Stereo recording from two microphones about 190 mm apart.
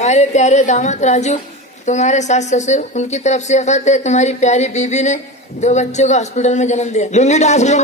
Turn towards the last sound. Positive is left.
turn(degrees=35)  # may be behind; listen again after turning